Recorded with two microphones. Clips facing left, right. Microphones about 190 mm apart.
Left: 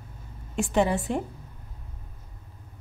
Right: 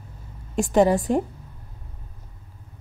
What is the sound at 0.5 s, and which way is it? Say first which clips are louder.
Speech: right 6 dB; 40° right (ahead or behind).